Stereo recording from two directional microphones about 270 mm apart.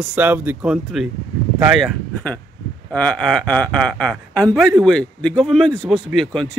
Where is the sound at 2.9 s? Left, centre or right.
Centre.